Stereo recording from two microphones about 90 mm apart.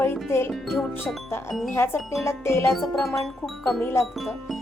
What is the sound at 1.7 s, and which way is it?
Speech, 30° left (ahead or behind).